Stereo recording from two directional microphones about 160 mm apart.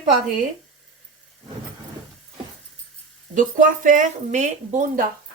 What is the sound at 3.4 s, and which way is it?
Speech, 55° right (ahead or behind).